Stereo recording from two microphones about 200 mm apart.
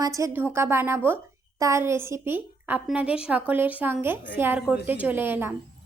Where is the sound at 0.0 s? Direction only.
15° right (ahead or behind).